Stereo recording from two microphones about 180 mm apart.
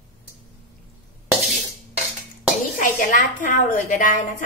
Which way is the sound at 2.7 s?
50° left (ahead or behind).